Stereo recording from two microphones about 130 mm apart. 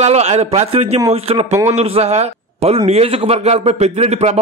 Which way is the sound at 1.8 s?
50° right (ahead or behind).